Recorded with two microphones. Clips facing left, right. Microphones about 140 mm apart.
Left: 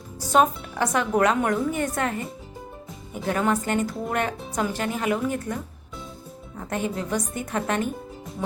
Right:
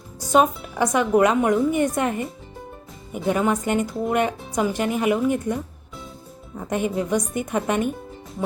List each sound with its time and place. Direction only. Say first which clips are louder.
0.3 s a woman's voice: right 2 dB; 5° right (ahead or behind)
6.6 s speech: right 4 dB; 15° right (ahead or behind)